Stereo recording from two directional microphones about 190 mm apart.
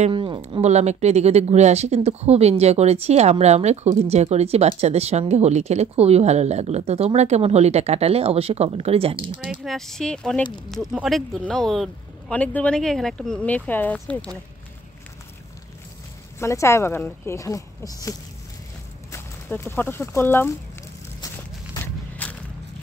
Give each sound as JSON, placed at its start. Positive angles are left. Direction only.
{"t": 0.0, "sound": "speech", "side_deg": -25}
{"t": 9.4, "sound": "speech", "side_deg": 0}
{"t": 16.3, "sound": "speech", "side_deg": 15}
{"t": 19.1, "sound": "speech", "side_deg": 15}
{"t": 21.7, "sound": "walk", "side_deg": 10}